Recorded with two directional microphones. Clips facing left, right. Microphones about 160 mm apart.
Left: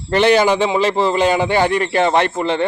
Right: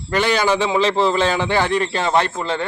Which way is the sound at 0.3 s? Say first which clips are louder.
Left 3 dB; 15° left (ahead or behind).